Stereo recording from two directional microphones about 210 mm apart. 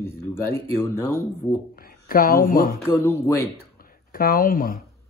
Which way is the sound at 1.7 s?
45° left (ahead or behind).